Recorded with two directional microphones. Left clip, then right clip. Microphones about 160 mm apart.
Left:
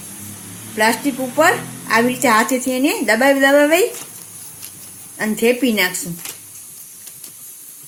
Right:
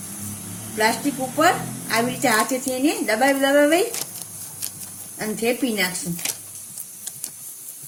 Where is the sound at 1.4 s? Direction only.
50° left (ahead or behind).